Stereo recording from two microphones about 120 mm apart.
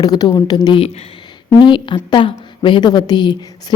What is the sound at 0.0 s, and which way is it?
Speech, 35° left (ahead or behind).